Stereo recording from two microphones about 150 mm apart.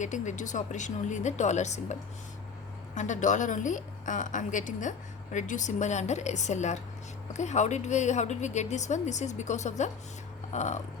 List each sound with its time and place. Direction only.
0.0 s a woman's voice: 55° left (ahead or behind)